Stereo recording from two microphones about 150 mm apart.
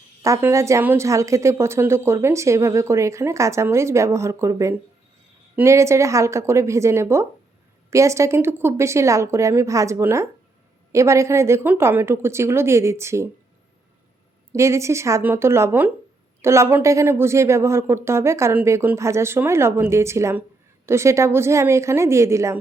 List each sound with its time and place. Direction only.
0.2 s a woman's voice: 20° right (ahead or behind)
14.5 s a woman's voice: 20° right (ahead or behind)